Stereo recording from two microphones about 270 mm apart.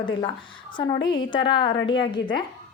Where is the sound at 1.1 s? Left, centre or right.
Centre.